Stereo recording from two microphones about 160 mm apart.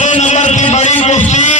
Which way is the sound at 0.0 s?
45° left (ahead or behind).